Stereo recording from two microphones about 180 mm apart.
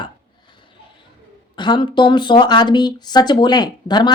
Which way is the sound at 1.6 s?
25° left (ahead or behind).